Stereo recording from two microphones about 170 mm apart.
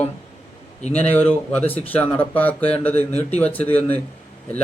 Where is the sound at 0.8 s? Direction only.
40° left (ahead or behind).